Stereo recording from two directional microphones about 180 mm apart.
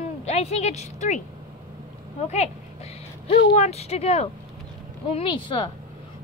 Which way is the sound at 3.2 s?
35° left (ahead or behind).